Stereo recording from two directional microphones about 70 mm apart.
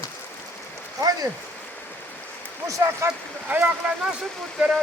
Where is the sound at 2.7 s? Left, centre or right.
Right.